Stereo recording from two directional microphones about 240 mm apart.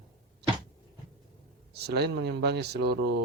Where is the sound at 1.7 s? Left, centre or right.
Right.